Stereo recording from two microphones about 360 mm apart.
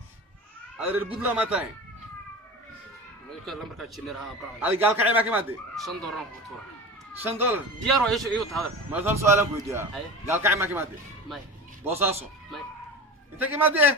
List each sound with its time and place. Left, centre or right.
0.9 s speech: centre
3.4 s speech: centre
11.9 s a man's voice: centre